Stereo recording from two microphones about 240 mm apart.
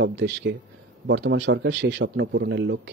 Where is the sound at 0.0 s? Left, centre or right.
Right.